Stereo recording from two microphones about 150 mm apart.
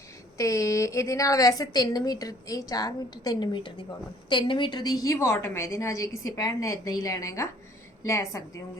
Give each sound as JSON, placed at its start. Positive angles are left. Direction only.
{"t": 0.3, "sound": "a woman's voice", "side_deg": 20}